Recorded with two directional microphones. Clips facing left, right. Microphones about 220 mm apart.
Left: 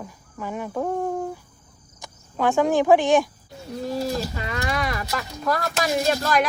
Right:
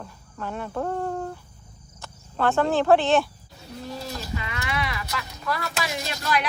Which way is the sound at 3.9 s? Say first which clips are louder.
Left 7 dB; 40° left (ahead or behind).